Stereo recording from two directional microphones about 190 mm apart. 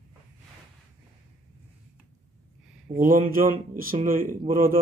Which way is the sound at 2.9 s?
50° right (ahead or behind).